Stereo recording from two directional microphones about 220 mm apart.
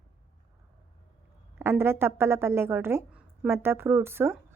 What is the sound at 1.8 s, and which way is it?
A woman's voice, 10° right (ahead or behind).